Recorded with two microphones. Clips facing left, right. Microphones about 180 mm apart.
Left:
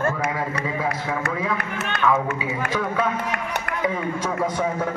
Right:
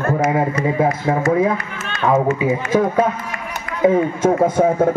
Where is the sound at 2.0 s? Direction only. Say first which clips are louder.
Right 7 dB; 40° right (ahead or behind).